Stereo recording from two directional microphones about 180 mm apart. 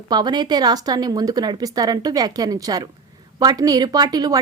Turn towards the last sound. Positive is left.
turn(degrees=-20)  # may be behind; listen again after turning